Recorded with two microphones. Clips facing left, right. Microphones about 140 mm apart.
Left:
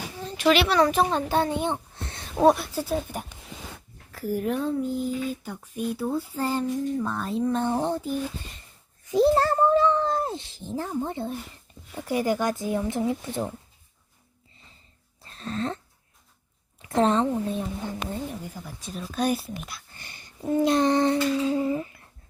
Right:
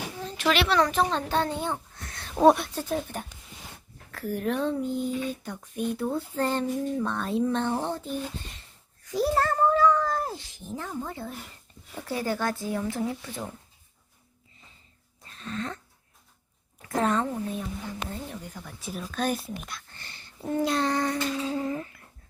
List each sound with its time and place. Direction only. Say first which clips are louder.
0.2 s a child's voice: left 4 dB; 5° left (ahead or behind); by 2.2 s 25° left (ahead or behind)
2.4 s speech: even; centre (ahead or behind)
7.6 s speech: left 3 dB; 15° left (ahead or behind)
9.0 s speech: left 5 dB; 25° left (ahead or behind)
15.2 s a sound: left 4 dB; 35° left (ahead or behind)
16.9 s a woman's voice: left 4 dB; 25° left (ahead or behind)
18.8 s speech: right 2 dB; 5° right (ahead or behind)
19.0 s a child's voice: left 3 dB; 10° left (ahead or behind)
21.6 s speech: left 5 dB; 10° left (ahead or behind)